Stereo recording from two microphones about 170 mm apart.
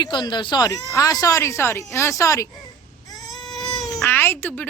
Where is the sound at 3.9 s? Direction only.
10° left (ahead or behind).